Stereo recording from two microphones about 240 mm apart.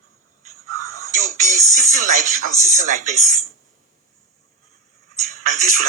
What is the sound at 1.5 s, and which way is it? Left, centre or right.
Music, right.